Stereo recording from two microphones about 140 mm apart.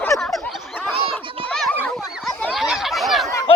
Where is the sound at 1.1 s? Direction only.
5° left (ahead or behind).